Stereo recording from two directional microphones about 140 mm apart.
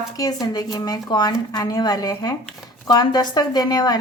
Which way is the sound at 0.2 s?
30° left (ahead or behind).